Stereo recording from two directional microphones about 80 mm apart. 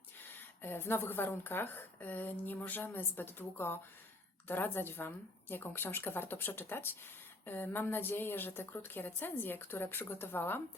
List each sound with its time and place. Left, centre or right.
0.6 s a woman's voice: left